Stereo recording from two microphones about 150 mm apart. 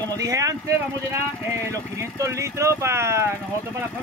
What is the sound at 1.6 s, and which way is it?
Speech, 20° right (ahead or behind).